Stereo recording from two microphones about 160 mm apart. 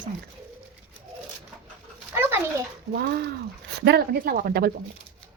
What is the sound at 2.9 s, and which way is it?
Speech, 75° right (ahead or behind).